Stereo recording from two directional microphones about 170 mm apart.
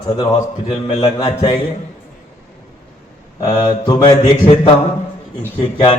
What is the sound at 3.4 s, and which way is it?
A man's voice, 25° left (ahead or behind).